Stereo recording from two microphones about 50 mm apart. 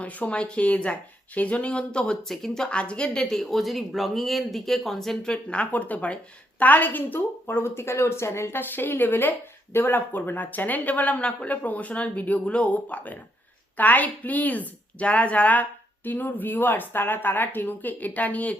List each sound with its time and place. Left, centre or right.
0.0 s speech: left
2.2 s speech: centre
2.6 s speech: left
3.2 s speech: centre; by 7.2 s left
7.4 s speech: left
8.5 s speech: left
11.2 s speech: left
16.0 s speech: left